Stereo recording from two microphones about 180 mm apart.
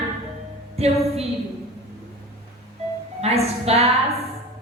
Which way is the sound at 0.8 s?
35° right (ahead or behind).